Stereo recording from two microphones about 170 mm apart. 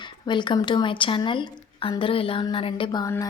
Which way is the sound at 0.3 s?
25° left (ahead or behind).